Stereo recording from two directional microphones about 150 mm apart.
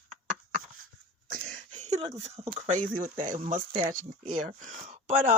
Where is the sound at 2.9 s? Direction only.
60° right (ahead or behind).